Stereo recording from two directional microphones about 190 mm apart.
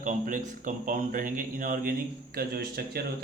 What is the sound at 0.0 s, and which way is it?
A man's voice, 40° right (ahead or behind).